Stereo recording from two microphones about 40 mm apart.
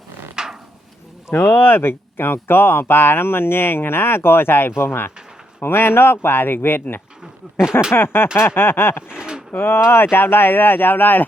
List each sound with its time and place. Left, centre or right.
0.4 s a sound: centre
1.4 s speech: left
4.8 s speech: left
5.5 s speech: left
7.4 s speech: right
7.9 s speech: left
9.0 s a sound: right
9.6 s speech: left